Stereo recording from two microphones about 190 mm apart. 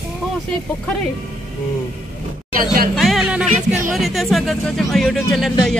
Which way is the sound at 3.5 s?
45° right (ahead or behind).